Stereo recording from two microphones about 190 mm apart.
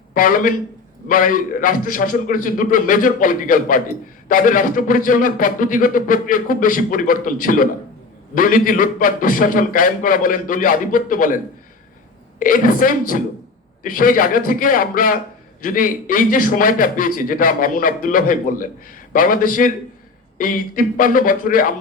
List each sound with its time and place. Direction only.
0.1 s a man's voice: 45° left (ahead or behind)
12.4 s a man's voice: 45° left (ahead or behind)